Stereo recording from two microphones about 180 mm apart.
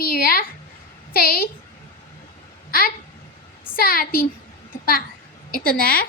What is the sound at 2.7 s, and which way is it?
A child's voice, 55° left (ahead or behind).